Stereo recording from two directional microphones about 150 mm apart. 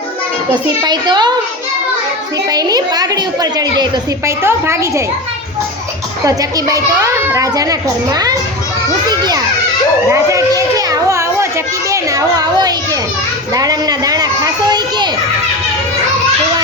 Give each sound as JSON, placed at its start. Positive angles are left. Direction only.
{"t": 0.5, "sound": "a child's voice", "side_deg": -30}
{"t": 2.5, "sound": "a child's voice", "side_deg": -25}
{"t": 4.3, "sound": "a woman's voice", "side_deg": -15}
{"t": 6.2, "sound": "a child's voice", "side_deg": -20}
{"t": 10.1, "sound": "children playing", "side_deg": -20}
{"t": 11.9, "sound": "a child's voice", "side_deg": -25}
{"t": 13.5, "sound": "children playing", "side_deg": -25}